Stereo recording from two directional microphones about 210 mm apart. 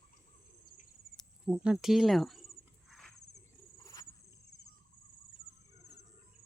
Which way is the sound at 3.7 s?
15° left (ahead or behind).